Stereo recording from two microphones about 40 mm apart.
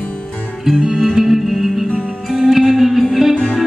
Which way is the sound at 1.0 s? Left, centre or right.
Centre.